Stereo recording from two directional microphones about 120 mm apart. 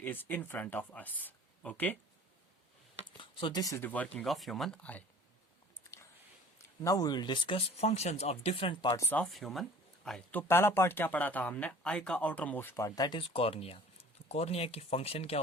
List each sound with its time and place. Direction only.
0.0 s speech: 15° left (ahead or behind)
3.2 s speech: 45° left (ahead or behind)
3.6 s speech: 25° left (ahead or behind)
3.8 s speech: 10° left (ahead or behind)
4.3 s speech: centre (ahead or behind)
6.8 s speech: 30° left (ahead or behind); by 8.7 s 55° left (ahead or behind)
9.0 s speech: 15° left (ahead or behind)
9.2 s speech: centre (ahead or behind)
10.5 s speech: 20° left (ahead or behind)
13.1 s speech: 50° left (ahead or behind)